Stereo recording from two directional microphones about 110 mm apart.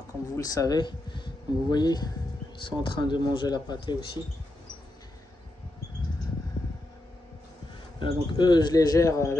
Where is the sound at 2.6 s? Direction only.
50° left (ahead or behind).